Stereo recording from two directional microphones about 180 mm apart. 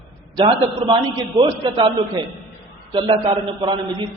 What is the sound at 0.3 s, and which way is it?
A man's voice, 25° right (ahead or behind).